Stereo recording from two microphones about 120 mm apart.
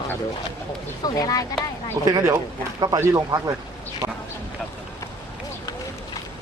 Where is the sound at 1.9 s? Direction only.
25° right (ahead or behind).